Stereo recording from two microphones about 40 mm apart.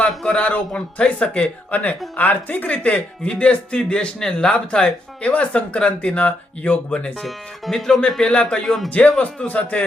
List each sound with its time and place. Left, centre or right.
0.3 s speech: left
2.6 s speech: left
5.2 s speech: left
7.3 s speech: centre
8.2 s speech: left
8.6 s speech: centre
9.0 s speech: left